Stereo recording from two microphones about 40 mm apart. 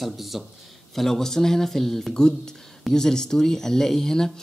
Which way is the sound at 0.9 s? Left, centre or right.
Centre.